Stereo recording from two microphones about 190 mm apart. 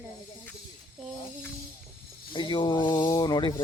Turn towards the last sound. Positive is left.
turn(degrees=20)  # may be behind; listen again after turning